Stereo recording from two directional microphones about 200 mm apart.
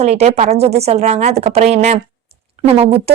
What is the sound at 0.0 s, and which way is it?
A woman's voice, 35° right (ahead or behind).